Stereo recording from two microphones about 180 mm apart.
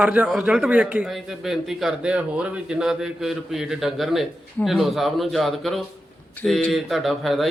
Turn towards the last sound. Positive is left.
turn(degrees=0)  # may be behind; listen again after turning